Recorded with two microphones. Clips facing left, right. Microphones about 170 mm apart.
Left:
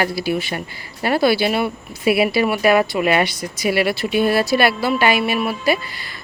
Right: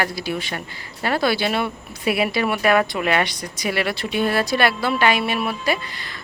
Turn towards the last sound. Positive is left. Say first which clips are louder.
# left 3 dB
turn(degrees=5)  # may be behind; listen again after turning